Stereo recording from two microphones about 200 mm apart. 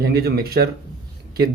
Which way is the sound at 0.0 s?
50° right (ahead or behind).